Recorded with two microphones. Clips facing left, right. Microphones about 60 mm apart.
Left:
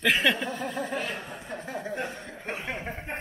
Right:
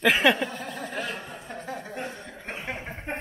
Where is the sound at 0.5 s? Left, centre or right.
Centre.